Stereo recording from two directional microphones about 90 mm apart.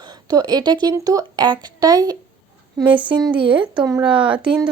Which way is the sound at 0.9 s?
40° right (ahead or behind).